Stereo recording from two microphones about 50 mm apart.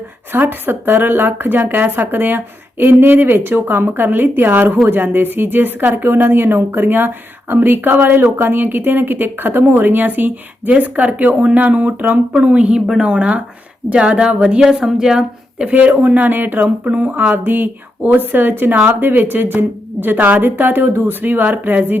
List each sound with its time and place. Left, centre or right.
0.3 s speech: right
12.3 s a woman's voice: right
14.6 s speech: centre
15.7 s speech: right